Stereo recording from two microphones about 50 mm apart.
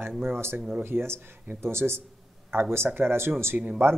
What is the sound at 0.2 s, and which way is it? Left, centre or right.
Speech, right.